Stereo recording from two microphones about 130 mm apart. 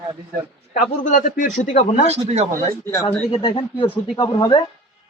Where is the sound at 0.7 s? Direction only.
80° left.